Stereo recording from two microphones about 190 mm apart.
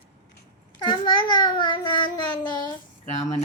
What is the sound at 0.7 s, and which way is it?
A child's voice, 25° left (ahead or behind).